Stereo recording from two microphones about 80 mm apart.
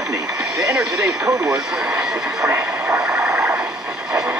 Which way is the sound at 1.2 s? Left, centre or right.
Right.